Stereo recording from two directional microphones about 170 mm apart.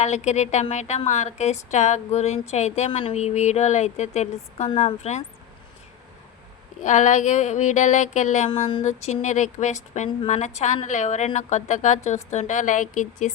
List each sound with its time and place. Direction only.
0.0 s a woman's voice: 45° left (ahead or behind)
6.8 s a woman's voice: 45° left (ahead or behind)